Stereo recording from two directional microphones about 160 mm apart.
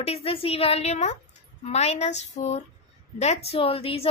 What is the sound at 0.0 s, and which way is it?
A woman's voice, 40° left (ahead or behind).